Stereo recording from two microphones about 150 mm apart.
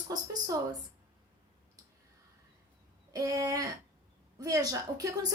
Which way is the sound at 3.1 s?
25° right (ahead or behind).